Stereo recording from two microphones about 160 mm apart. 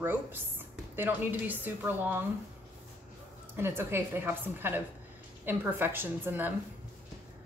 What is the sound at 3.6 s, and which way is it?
A woman's voice, 15° right (ahead or behind).